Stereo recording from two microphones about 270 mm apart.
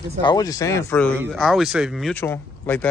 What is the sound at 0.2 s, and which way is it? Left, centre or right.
A man's voice, centre.